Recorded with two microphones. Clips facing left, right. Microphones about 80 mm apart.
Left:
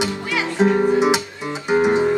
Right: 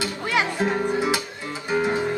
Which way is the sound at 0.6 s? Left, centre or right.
Centre.